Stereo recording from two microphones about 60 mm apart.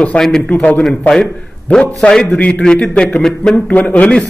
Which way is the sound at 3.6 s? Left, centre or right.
Left.